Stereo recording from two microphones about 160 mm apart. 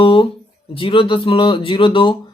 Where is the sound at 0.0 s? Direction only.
30° left (ahead or behind).